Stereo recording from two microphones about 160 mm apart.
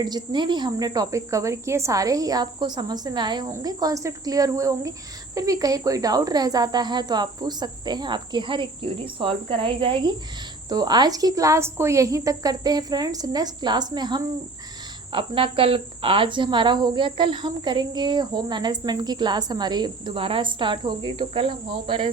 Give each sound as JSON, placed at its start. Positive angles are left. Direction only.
{"t": 0.0, "sound": "speech", "side_deg": -25}